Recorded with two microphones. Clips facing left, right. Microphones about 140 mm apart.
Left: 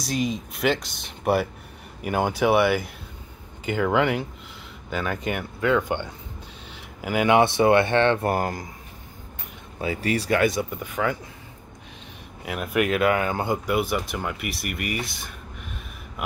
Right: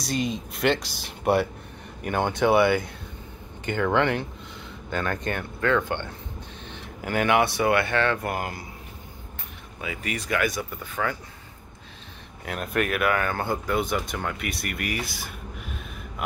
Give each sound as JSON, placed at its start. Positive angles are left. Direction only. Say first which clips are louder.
{"t": 0.0, "sound": "speech", "louder": "left 1 dB", "side_deg": 0}
{"t": 9.8, "sound": "speech", "louder": "left 7 dB", "side_deg": 35}
{"t": 12.4, "sound": "speech", "louder": "left 2 dB", "side_deg": 5}
{"t": 12.8, "sound": "speech", "louder": "left 4 dB", "side_deg": 25}